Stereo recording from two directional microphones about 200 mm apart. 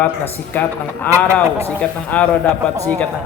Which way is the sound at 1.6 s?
10° left (ahead or behind).